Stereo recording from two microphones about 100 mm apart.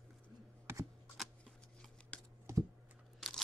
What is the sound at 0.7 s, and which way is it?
Computer keyboard, 25° right (ahead or behind).